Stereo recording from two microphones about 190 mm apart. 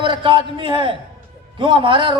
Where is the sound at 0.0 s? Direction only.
25° right (ahead or behind).